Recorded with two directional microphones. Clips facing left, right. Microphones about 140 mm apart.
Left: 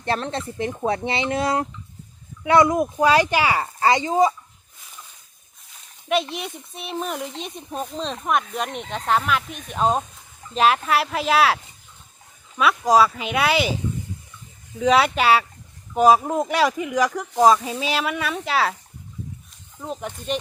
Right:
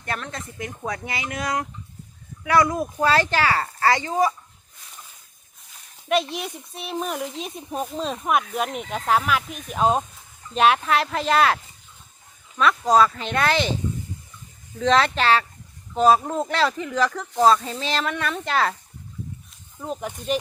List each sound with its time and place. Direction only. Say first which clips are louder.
0.0 s speech: left 6 dB; 30° left (ahead or behind)
6.1 s speech: even; centre (ahead or behind)
14.8 s speech: left 2 dB; 10° left (ahead or behind)
19.8 s speech: right 1 dB; centre (ahead or behind)